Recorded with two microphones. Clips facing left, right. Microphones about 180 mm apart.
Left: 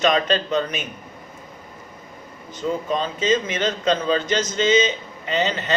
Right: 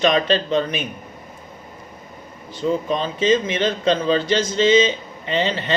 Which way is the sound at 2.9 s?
25° right (ahead or behind).